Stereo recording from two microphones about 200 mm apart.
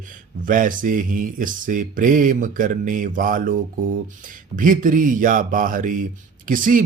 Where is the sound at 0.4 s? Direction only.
40° right (ahead or behind).